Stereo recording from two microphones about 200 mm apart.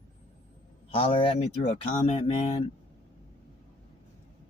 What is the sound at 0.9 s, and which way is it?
A man's voice, 30° left (ahead or behind).